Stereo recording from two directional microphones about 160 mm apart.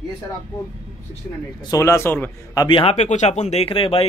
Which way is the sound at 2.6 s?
30° left (ahead or behind).